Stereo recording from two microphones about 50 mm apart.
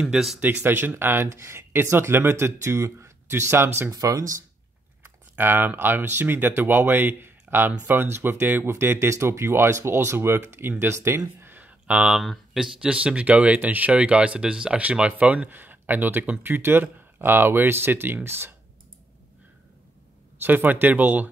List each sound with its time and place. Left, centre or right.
0.0 s speech: centre
0.4 s speech: right
0.7 s speech: right
1.3 s speech: right
5.4 s speech: right
9.1 s speech: right
9.9 s speech: right
11.5 s a sound: right
12.5 s speech: centre; by 15.5 s right
15.5 s speech: right
20.4 s speech: right